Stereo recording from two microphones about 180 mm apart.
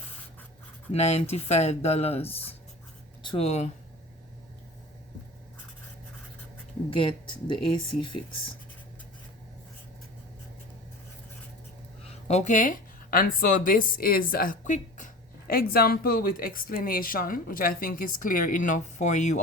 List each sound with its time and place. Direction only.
0.9 s speech: 35° left (ahead or behind)
3.2 s speech: 35° left (ahead or behind)
6.9 s speech: 30° left (ahead or behind)
12.3 s a woman's voice: 40° left (ahead or behind)